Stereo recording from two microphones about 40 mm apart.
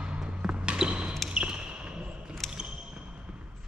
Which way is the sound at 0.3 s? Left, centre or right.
Right.